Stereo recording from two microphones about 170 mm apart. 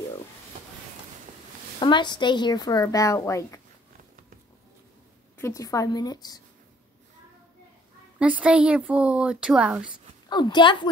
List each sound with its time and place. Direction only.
1.8 s speech: 25° left (ahead or behind)
5.4 s speech: 20° left (ahead or behind)
8.2 s a woman's voice: 5° right (ahead or behind)
10.3 s speech: 25° left (ahead or behind)